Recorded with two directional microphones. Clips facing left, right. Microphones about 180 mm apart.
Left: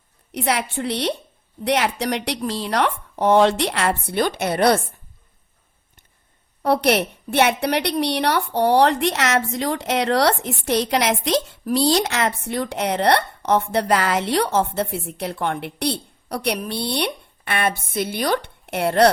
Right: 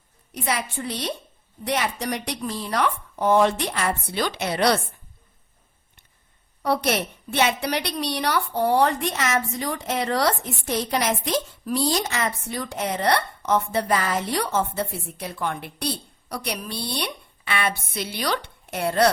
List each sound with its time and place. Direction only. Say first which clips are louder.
0.3 s speech: left 4 dB; 65° left (ahead or behind); by 4.9 s 50° left (ahead or behind)
6.6 s a woman's voice: left 5 dB; 65° left (ahead or behind)